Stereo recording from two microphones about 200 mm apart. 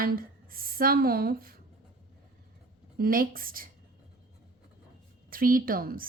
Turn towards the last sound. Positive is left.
turn(degrees=-45)  # may be behind; listen again after turning